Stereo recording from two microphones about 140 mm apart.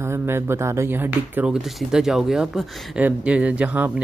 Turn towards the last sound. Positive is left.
turn(degrees=-10)  # may be behind; listen again after turning